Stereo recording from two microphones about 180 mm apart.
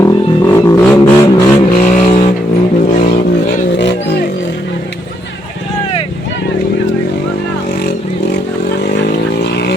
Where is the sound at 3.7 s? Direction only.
70° left (ahead or behind).